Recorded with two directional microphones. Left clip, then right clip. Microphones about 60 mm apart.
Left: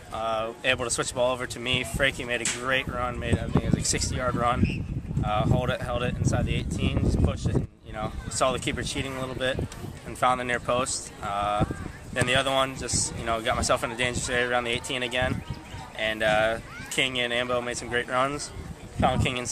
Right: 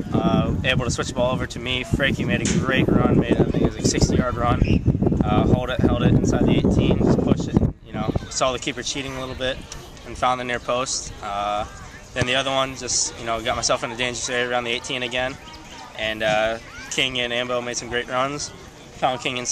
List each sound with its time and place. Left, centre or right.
0.1 s speech: centre